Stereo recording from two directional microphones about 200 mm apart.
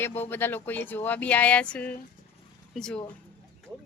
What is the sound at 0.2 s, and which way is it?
A woman's voice, 10° left (ahead or behind).